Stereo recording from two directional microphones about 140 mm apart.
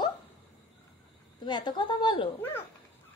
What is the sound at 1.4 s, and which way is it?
Speech, 30° left (ahead or behind).